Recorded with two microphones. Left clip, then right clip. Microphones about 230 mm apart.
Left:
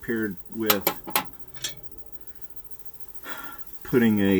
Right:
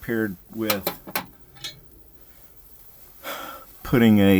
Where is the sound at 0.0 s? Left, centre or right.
Right.